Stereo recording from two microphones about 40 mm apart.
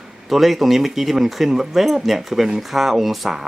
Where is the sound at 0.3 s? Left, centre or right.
Centre.